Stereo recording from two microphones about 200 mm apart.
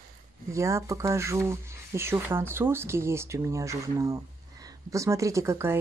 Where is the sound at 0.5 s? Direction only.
15° right (ahead or behind).